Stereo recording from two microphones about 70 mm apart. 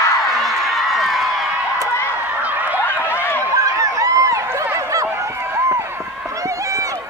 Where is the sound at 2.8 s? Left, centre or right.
Left.